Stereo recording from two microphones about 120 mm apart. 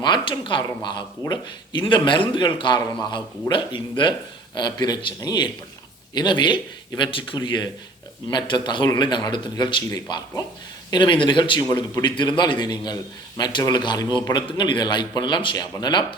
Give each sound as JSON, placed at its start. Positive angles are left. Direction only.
{"t": 0.0, "sound": "speech", "side_deg": 40}